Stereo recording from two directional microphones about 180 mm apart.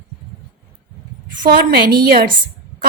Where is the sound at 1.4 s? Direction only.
55° right (ahead or behind).